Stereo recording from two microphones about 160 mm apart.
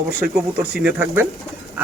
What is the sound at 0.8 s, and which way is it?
Speech, 10° right (ahead or behind).